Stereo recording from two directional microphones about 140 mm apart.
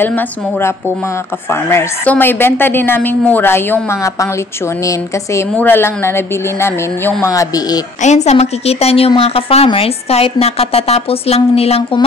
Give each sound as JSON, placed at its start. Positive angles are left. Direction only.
{"t": 0.0, "sound": "a woman's voice", "side_deg": 15}
{"t": 7.3, "sound": "speech", "side_deg": 25}
{"t": 8.0, "sound": "a woman's voice", "side_deg": 55}